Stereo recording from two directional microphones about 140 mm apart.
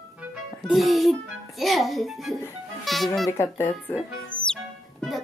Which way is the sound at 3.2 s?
20° left (ahead or behind).